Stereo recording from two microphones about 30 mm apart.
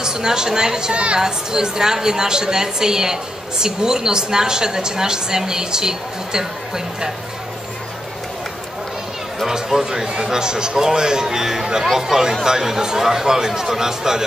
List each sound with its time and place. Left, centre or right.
0.0 s a woman's voice: right
0.9 s speech: right
1.2 s a woman's voice: right
9.5 s a woman's voice: centre
10.0 s a woman's voice: right; by 14.2 s centre